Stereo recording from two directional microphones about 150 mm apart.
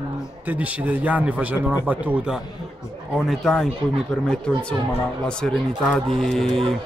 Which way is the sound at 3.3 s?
5° left (ahead or behind).